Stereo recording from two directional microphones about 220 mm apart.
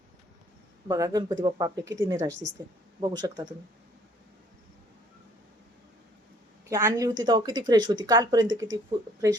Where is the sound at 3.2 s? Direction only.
20° right (ahead or behind).